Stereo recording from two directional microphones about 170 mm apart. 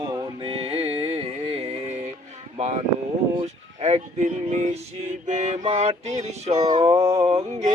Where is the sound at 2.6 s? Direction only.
40° right (ahead or behind).